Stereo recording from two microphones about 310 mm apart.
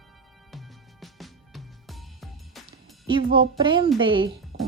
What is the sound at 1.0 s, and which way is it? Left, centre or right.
Music, centre.